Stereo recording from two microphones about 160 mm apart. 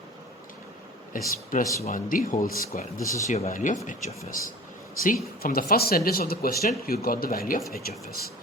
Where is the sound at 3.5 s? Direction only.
55° left (ahead or behind).